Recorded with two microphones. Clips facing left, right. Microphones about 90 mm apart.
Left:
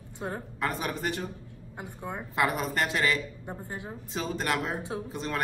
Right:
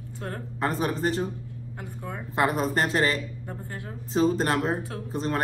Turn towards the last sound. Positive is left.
turn(degrees=-35)  # may be behind; listen again after turning